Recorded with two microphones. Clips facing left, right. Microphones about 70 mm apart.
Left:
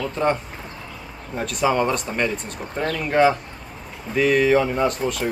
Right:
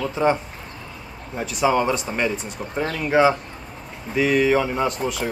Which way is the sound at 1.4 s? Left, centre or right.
Centre.